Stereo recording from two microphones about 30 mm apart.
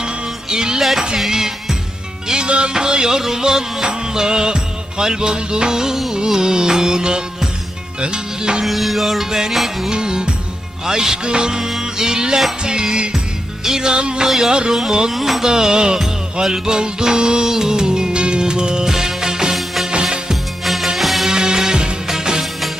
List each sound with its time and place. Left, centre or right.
0.5 s music: right
0.8 s music: centre
2.5 s music: right
8.6 s music: centre
9.9 s music: right
14.3 s music: centre
15.4 s music: right
19.5 s music: centre
19.9 s music: right
20.7 s music: centre
21.2 s music: right